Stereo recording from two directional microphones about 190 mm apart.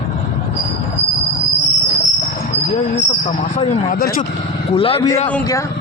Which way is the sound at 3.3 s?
35° left (ahead or behind).